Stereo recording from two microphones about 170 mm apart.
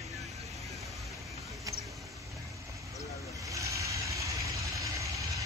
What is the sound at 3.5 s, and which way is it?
Vehicle, 20° right (ahead or behind).